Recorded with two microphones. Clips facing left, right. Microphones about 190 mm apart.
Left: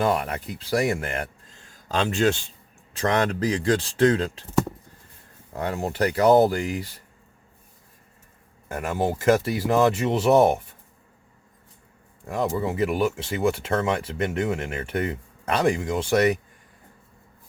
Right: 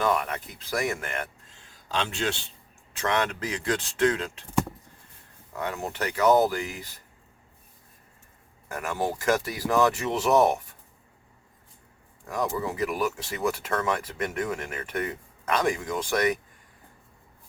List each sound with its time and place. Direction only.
0.0 s speech: 30° left (ahead or behind)
5.5 s speech: 35° left (ahead or behind)
8.7 s speech: 30° left (ahead or behind)
12.2 s speech: 25° left (ahead or behind)